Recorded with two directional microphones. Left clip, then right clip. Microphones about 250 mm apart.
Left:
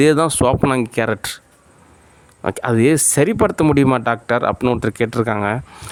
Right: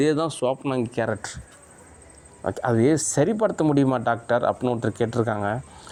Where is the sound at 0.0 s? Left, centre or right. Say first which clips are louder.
Left 8 dB; left.